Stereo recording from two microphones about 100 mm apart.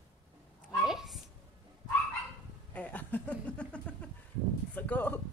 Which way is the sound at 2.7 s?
15° left (ahead or behind).